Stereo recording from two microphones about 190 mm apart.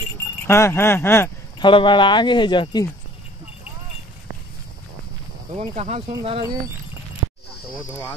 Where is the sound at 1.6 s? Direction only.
25° left (ahead or behind).